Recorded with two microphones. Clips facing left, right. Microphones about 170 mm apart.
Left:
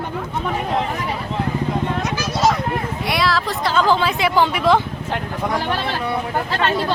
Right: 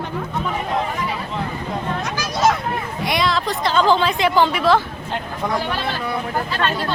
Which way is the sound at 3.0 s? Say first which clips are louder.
Right 1 dB; centre (ahead or behind).